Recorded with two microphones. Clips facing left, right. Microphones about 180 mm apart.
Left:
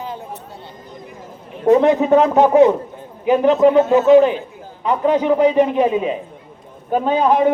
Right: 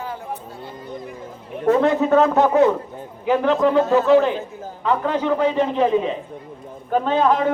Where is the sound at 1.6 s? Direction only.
15° left (ahead or behind).